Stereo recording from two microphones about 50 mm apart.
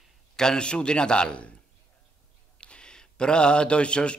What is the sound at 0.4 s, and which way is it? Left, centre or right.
Mantra, centre.